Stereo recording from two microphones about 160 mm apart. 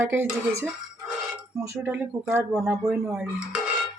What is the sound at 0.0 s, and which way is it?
Speech, 15° right (ahead or behind).